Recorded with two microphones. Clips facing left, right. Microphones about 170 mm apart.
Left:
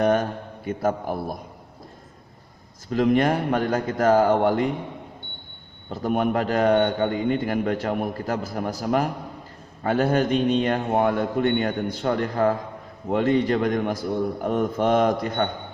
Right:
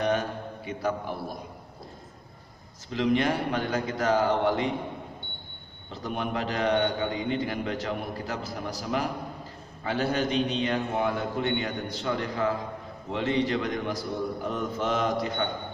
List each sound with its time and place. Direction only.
0.0 s a man's voice: 50° left (ahead or behind)
2.9 s a man's voice: 50° left (ahead or behind)
5.9 s a man's voice: 50° left (ahead or behind)